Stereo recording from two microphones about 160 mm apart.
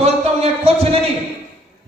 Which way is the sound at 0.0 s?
40° right (ahead or behind).